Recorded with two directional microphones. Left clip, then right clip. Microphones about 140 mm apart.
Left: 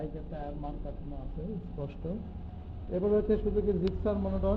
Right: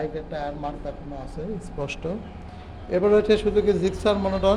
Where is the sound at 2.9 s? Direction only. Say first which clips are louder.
Right 10 dB; 45° right (ahead or behind).